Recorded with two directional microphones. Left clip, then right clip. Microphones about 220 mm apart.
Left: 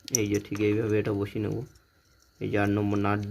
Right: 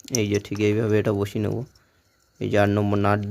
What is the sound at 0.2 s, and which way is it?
Speech, 45° right (ahead or behind).